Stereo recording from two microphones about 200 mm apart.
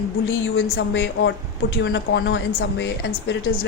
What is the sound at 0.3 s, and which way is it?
A woman's voice, 75° left (ahead or behind).